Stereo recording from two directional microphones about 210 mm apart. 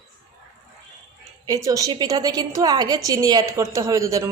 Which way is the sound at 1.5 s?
15° right (ahead or behind).